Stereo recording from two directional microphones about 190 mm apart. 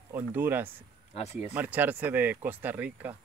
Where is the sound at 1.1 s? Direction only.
35° left (ahead or behind).